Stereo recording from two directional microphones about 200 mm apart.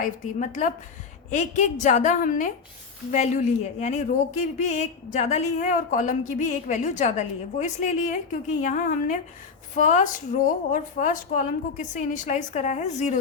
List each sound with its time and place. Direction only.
0.0 s speech: 40° left (ahead or behind)